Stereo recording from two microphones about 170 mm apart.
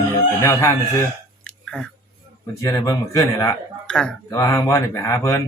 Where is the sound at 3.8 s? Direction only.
5° left (ahead or behind).